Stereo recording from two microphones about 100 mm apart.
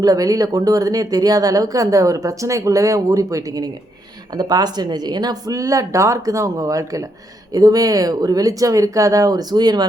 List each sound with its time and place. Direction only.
0.0 s speech: 35° right (ahead or behind)